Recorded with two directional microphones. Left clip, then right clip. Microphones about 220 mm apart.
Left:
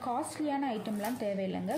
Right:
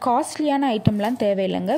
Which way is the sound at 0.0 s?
40° right (ahead or behind).